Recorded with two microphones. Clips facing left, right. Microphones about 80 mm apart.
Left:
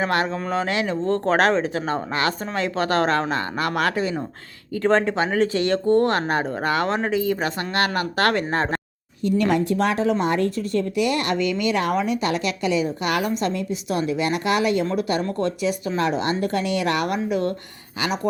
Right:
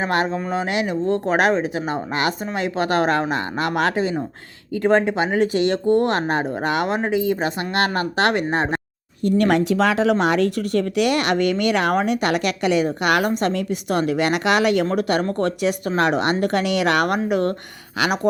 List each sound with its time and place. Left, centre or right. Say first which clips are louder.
0.0 s speech: right 1 dB; right
4.8 s speech: right 2 dB; centre
9.2 s speech: right 3 dB; right
9.6 s speech: right 3 dB; right
14.8 s speech: right 3 dB; right